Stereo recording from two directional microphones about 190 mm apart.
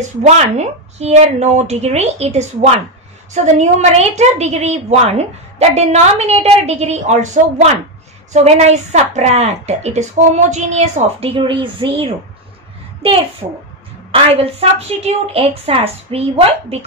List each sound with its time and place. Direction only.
0.2 s a woman's voice: 35° right (ahead or behind)